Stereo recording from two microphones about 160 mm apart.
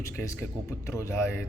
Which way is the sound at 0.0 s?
15° left (ahead or behind).